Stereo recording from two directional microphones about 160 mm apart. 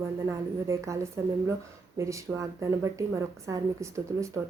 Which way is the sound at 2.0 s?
20° right (ahead or behind).